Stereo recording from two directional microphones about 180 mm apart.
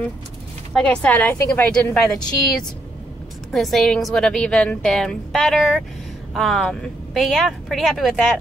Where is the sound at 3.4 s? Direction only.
Centre (ahead or behind).